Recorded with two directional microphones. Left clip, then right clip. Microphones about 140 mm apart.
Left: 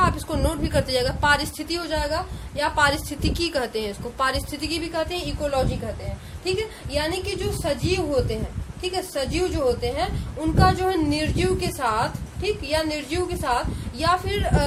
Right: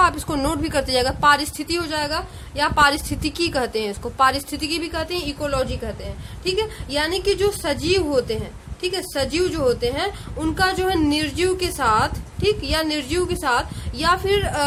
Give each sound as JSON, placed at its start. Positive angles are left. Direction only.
{"t": 0.0, "sound": "a woman's voice", "side_deg": -50}